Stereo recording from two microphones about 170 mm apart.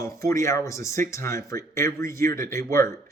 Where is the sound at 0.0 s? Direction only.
15° left (ahead or behind).